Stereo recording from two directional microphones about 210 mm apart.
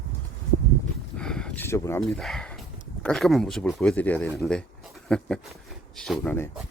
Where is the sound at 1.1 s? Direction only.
5° left (ahead or behind).